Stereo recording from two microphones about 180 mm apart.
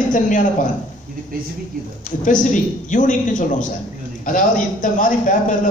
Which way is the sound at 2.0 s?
45° left (ahead or behind).